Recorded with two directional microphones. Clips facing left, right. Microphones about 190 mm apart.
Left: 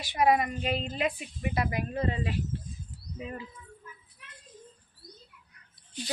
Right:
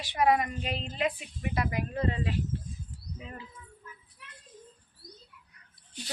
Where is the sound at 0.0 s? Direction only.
10° left (ahead or behind).